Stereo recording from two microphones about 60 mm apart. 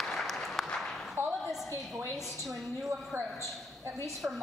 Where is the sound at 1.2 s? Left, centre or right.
Right.